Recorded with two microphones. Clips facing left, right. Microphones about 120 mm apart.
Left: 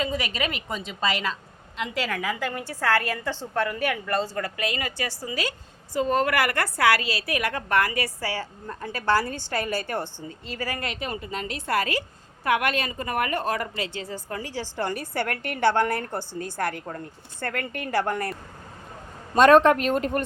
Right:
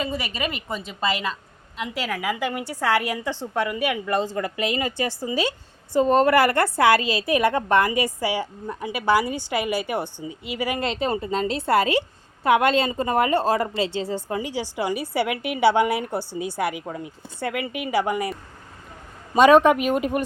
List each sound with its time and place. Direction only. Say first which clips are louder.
0.0 s a woman's voice: even; 5° right (ahead or behind); by 14.3 s 30° right (ahead or behind)
14.3 s a woman's voice: right 1 dB; 15° right (ahead or behind)